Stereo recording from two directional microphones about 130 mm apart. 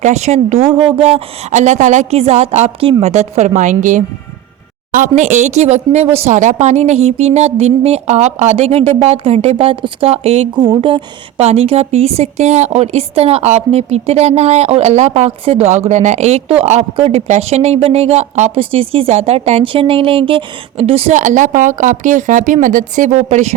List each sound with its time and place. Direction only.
0.0 s a woman's voice: 60° right (ahead or behind)
0.7 s a woman's voice: 40° right (ahead or behind)
10.5 s a woman's voice: 35° right (ahead or behind); by 15.8 s 55° right (ahead or behind)
15.9 s a woman's voice: 65° right (ahead or behind)
18.6 s a woman's voice: 45° right (ahead or behind)
21.2 s a woman's voice: 75° right (ahead or behind); by 23.6 s 55° right (ahead or behind)